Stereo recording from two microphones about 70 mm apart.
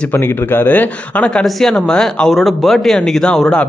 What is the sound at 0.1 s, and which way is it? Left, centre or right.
Speech, left.